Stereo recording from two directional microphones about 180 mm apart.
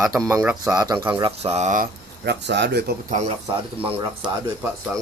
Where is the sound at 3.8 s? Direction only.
30° right (ahead or behind).